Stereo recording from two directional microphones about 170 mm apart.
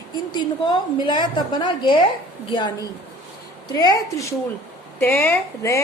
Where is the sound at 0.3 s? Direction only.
25° left (ahead or behind).